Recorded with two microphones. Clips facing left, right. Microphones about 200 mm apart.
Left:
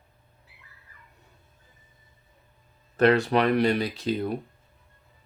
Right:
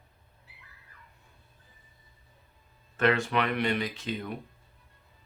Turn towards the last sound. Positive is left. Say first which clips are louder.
# left 7 dB
turn(degrees=35)  # may be behind; listen again after turning